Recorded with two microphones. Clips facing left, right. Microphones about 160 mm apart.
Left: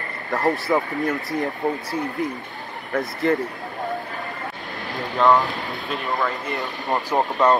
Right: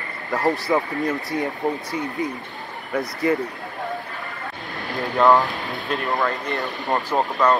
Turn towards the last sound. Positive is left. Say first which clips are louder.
# left 1 dB
turn(degrees=20)  # may be behind; listen again after turning